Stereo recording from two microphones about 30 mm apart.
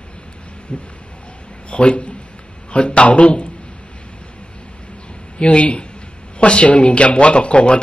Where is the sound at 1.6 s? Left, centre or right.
Left.